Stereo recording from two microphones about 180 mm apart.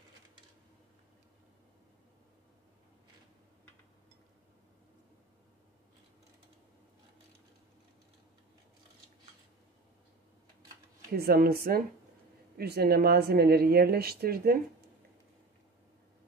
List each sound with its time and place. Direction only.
11.1 s speech: 60° right (ahead or behind)